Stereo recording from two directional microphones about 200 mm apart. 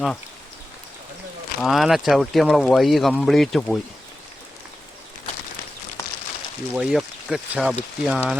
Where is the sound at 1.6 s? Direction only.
Centre (ahead or behind).